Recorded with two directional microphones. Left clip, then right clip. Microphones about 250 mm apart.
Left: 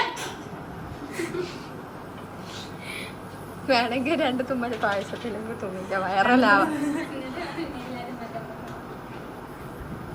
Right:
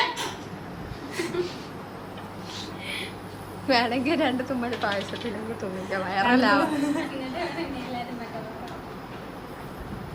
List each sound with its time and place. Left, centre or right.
3.7 s a woman's voice: centre